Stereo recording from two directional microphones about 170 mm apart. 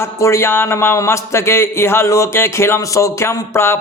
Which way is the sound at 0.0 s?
15° left (ahead or behind).